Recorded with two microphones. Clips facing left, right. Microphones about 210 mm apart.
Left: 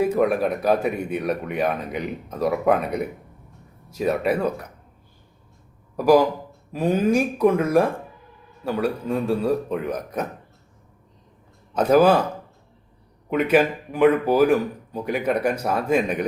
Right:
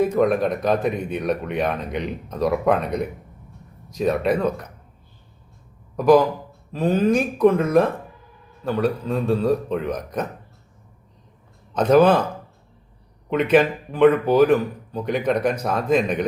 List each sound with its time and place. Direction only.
0.0 s speech: 10° left (ahead or behind)
6.7 s speech: 10° left (ahead or behind)
11.7 s speech: 5° left (ahead or behind)
13.3 s speech: 5° left (ahead or behind)